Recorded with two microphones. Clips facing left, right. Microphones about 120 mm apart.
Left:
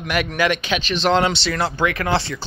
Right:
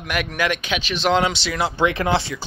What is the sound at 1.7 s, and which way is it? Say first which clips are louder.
Speech: right 3 dB; 20° right (ahead or behind).